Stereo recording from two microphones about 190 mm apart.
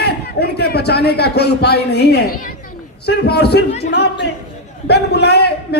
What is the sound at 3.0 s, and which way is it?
A man's voice, 60° left (ahead or behind).